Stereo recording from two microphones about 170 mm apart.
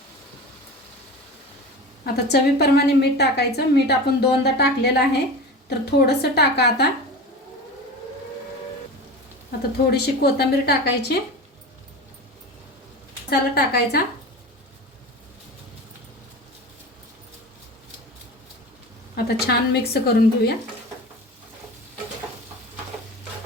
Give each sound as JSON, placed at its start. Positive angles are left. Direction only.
{"t": 2.2, "sound": "a woman's voice", "side_deg": 70}
{"t": 9.7, "sound": "a woman's voice", "side_deg": 70}
{"t": 13.3, "sound": "a woman's voice", "side_deg": 70}
{"t": 19.1, "sound": "a woman's voice", "side_deg": 70}